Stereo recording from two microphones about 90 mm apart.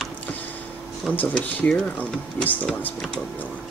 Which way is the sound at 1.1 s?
20° left (ahead or behind).